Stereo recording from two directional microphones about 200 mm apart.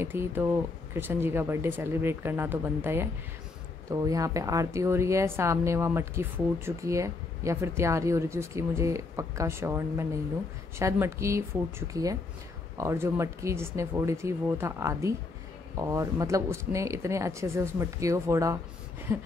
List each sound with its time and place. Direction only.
0.0 s a woman's voice: 10° right (ahead or behind)